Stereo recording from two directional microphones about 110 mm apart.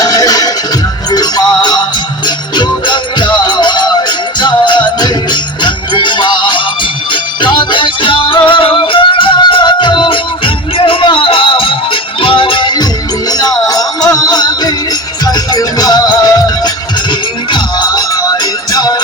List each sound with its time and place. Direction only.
0.0 s music: 35° left (ahead or behind)